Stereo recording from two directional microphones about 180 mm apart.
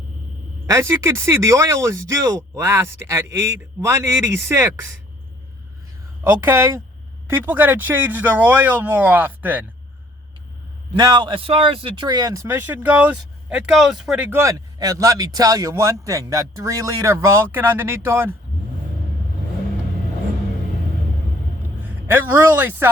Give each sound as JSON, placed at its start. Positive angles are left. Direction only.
{"t": 0.7, "sound": "a man's voice", "side_deg": -15}
{"t": 6.2, "sound": "a man's voice", "side_deg": -10}
{"t": 10.9, "sound": "a man's voice", "side_deg": -25}
{"t": 21.8, "sound": "a man's voice", "side_deg": -10}